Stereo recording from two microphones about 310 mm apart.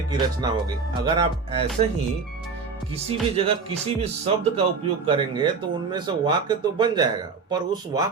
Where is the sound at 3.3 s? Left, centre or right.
Centre.